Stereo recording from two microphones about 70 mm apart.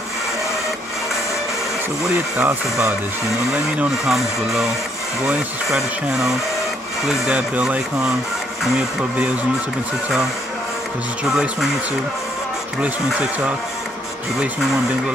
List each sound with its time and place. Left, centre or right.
2.3 s speech: right
4.1 s speech: centre
7.1 s speech: centre